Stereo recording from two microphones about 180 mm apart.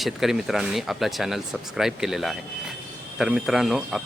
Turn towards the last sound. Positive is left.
turn(degrees=0)  # may be behind; listen again after turning